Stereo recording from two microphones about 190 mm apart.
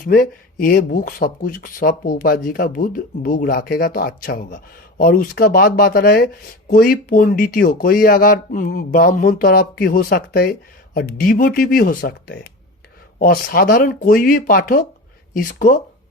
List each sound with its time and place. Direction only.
0.0 s speech: 50° left (ahead or behind)